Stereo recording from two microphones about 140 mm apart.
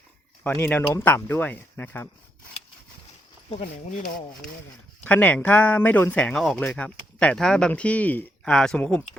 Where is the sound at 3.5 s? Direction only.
45° left (ahead or behind).